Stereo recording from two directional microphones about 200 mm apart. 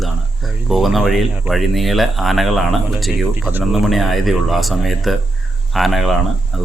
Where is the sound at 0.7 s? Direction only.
Centre (ahead or behind).